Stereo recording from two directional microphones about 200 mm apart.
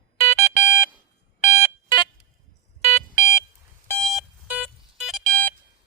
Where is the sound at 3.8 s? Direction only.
Centre (ahead or behind).